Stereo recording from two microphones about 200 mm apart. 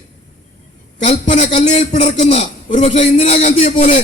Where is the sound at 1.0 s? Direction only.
35° left (ahead or behind).